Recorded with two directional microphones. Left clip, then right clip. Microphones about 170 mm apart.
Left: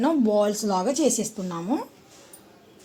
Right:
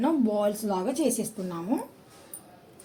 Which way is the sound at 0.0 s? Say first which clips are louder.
Left 4 dB; 35° left (ahead or behind).